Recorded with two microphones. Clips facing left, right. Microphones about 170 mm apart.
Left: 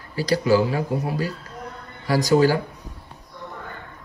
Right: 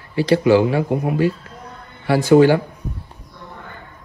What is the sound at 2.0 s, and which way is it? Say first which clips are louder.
Speech: right 6 dB; 40° left (ahead or behind).